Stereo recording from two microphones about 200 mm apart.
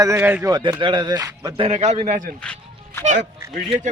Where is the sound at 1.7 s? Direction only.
30° right (ahead or behind).